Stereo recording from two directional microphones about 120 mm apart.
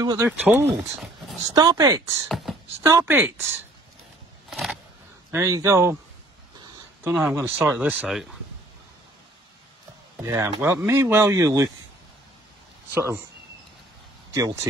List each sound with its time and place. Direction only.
0.0 s speech: 30° right (ahead or behind)
0.4 s speech: 20° right (ahead or behind)
1.5 s speech: 30° right (ahead or behind)
2.2 s speech: centre (ahead or behind)
2.8 s speech: 25° right (ahead or behind)
4.5 s a sound: centre (ahead or behind)
5.3 s speech: 25° right (ahead or behind)
7.1 s speech: 5° right (ahead or behind)
7.3 s speech: 15° right (ahead or behind)
8.1 s speech: centre (ahead or behind)
10.2 s speech: 25° right (ahead or behind)
12.9 s speech: 20° right (ahead or behind)
14.3 s speech: 25° right (ahead or behind)